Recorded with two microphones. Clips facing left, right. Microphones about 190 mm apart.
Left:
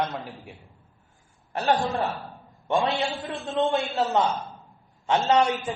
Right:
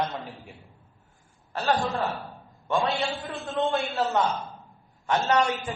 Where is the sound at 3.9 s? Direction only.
20° left (ahead or behind).